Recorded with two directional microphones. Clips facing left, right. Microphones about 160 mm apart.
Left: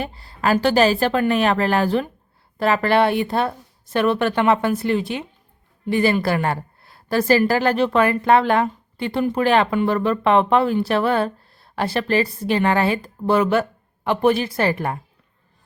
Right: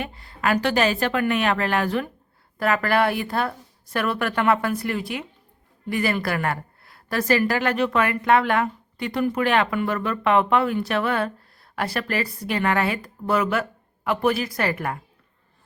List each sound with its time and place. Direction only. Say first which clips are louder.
0.0 s a woman's voice: left 3 dB; 35° left (ahead or behind)